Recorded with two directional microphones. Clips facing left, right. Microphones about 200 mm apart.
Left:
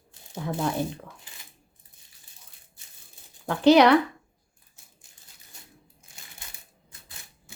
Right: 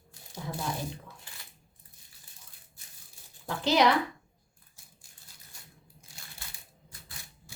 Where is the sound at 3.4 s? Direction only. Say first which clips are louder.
Left 8 dB; 65° left (ahead or behind).